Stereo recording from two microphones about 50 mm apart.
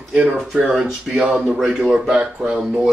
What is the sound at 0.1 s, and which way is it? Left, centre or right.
Speech, right.